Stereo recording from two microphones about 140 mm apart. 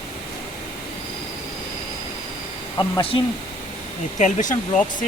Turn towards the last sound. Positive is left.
turn(degrees=60)  # may be behind; listen again after turning